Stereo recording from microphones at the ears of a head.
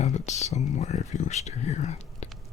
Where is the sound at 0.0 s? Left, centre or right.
Left.